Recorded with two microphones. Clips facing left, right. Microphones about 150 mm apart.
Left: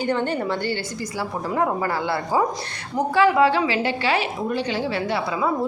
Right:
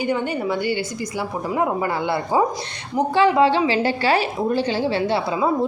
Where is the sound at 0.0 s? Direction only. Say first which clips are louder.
Right 1 dB; 10° right (ahead or behind).